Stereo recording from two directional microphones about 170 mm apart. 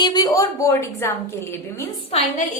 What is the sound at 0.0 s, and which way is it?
A woman's voice, 25° left (ahead or behind).